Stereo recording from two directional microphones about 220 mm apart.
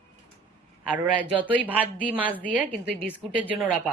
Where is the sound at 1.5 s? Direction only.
5° left (ahead or behind).